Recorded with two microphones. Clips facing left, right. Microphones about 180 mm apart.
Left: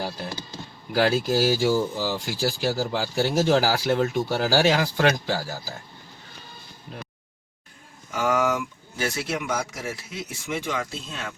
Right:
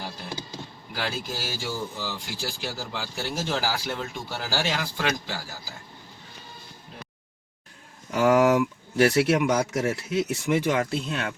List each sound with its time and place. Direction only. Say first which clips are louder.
0.9 s speech: left 11 dB; 40° left (ahead or behind)
5.3 s speech: left 8 dB; 40° left (ahead or behind)
8.1 s speech: right 4 dB; 70° right (ahead or behind)